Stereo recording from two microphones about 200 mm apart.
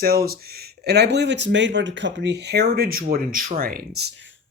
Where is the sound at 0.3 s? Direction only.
50° right (ahead or behind).